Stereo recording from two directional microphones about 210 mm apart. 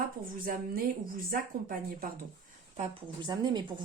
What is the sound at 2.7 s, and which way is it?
Speech, 25° right (ahead or behind).